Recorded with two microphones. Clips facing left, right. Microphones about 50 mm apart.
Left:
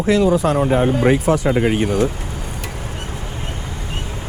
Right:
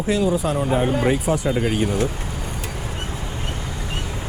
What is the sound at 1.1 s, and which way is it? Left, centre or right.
Speech, left.